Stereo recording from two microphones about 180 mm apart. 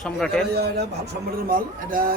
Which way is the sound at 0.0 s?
5° left (ahead or behind).